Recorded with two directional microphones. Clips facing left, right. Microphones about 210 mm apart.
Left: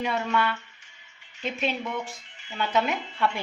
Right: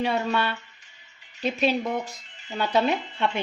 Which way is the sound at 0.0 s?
30° right (ahead or behind).